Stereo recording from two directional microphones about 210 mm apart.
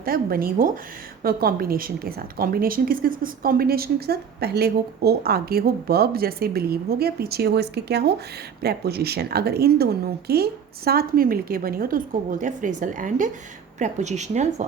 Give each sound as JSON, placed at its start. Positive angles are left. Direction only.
{"t": 0.0, "sound": "a woman's voice", "side_deg": -45}